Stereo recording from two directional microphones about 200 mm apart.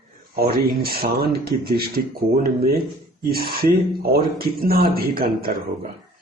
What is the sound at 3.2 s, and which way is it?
A man's voice, 50° right (ahead or behind).